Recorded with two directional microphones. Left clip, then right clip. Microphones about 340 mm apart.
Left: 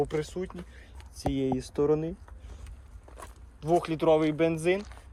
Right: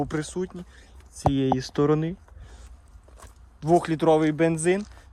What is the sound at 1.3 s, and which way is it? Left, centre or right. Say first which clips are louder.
Speech: right 2 dB; right.